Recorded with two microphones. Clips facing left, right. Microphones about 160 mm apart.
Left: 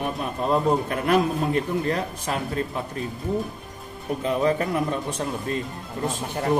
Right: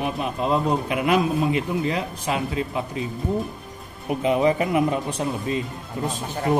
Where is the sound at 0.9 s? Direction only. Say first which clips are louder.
Right 1 dB; 10° right (ahead or behind).